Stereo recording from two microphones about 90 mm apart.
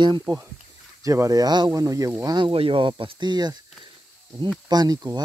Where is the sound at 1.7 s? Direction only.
40° right (ahead or behind).